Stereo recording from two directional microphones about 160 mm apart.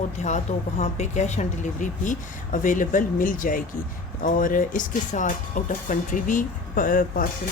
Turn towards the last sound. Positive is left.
turn(degrees=60)  # may be behind; listen again after turning